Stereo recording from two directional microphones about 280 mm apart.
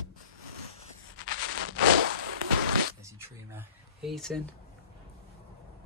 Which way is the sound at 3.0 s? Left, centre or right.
Centre.